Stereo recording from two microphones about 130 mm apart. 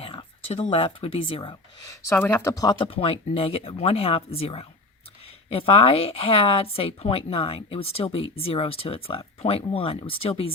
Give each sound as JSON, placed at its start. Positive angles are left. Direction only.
{"t": 0.0, "sound": "speech", "side_deg": 45}
{"t": 1.9, "sound": "a woman's voice", "side_deg": 15}